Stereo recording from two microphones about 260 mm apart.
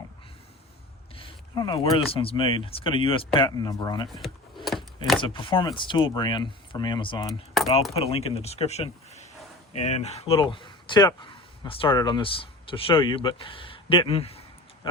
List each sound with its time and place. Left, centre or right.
1.1 s a sound: centre
2.1 s speech: centre
4.1 s power windows: centre
5.2 s speech: centre